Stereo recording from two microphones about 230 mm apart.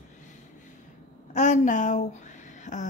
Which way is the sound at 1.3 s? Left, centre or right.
Left.